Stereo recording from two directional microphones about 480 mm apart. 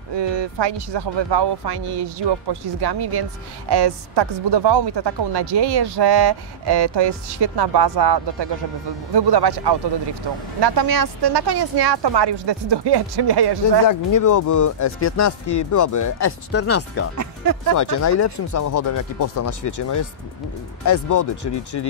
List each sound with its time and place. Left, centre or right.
0.1 s speech: right
13.8 s speech: left
17.2 s speech: right
17.7 s speech: left